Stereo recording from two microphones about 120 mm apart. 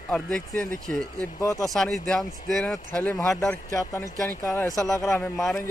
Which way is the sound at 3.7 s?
25° left (ahead or behind).